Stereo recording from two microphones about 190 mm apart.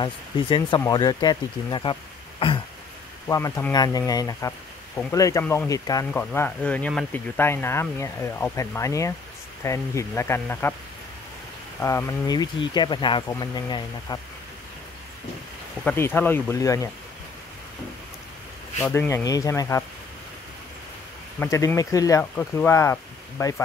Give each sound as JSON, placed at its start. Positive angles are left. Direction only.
{"t": 0.0, "sound": "speech", "side_deg": 25}
{"t": 3.3, "sound": "speech", "side_deg": 15}
{"t": 11.8, "sound": "speech", "side_deg": 15}
{"t": 15.8, "sound": "speech", "side_deg": 10}
{"t": 18.8, "sound": "speech", "side_deg": 10}
{"t": 21.4, "sound": "speech", "side_deg": 15}